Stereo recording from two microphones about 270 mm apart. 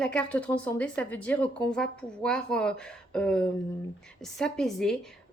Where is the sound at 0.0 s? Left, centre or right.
Centre.